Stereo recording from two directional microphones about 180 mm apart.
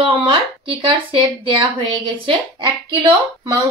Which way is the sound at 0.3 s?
30° right (ahead or behind).